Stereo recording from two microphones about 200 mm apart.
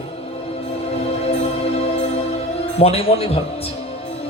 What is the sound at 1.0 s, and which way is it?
Music, 30° left (ahead or behind).